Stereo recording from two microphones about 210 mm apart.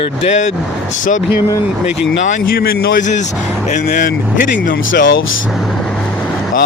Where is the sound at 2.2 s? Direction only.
40° left (ahead or behind).